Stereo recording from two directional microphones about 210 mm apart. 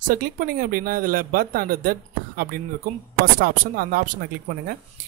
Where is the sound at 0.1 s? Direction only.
45° right (ahead or behind).